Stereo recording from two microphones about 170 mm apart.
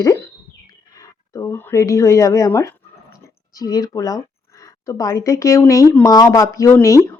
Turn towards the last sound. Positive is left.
turn(degrees=20)  # may be behind; listen again after turning